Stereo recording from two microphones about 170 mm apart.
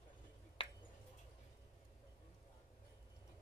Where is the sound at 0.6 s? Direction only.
35° left (ahead or behind).